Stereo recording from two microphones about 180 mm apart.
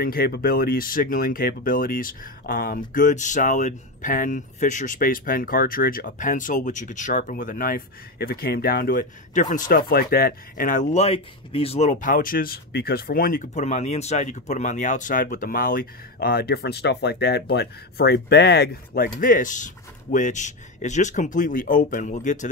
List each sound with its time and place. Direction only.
0.0 s speech: 55° left (ahead or behind)
19.1 s speech: 50° left (ahead or behind)